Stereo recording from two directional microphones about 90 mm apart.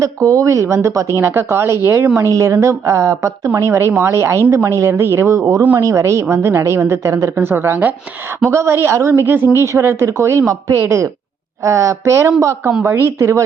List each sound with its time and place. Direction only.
0.0 s a woman's voice: 35° right (ahead or behind)